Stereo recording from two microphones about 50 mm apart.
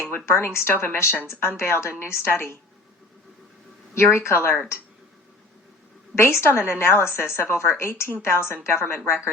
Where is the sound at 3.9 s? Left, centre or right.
Left.